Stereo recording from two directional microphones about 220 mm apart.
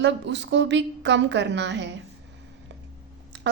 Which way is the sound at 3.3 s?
50° right (ahead or behind).